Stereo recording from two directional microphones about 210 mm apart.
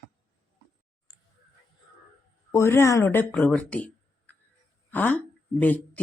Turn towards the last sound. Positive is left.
turn(degrees=5)  # may be behind; listen again after turning